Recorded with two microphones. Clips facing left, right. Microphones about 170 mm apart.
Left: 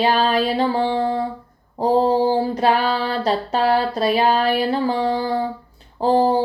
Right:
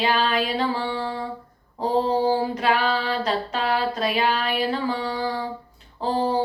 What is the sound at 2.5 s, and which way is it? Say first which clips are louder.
Female singing: left 4 dB; 35° left (ahead or behind).